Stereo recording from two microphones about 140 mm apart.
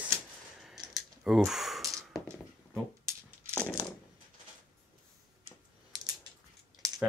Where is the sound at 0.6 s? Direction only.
Centre (ahead or behind).